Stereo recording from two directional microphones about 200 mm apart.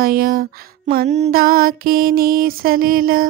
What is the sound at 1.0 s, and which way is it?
Music, 35° right (ahead or behind).